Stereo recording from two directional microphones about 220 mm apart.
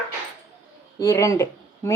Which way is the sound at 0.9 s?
15° left (ahead or behind).